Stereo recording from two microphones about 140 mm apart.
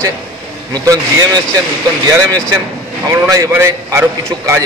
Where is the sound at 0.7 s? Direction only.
25° right (ahead or behind).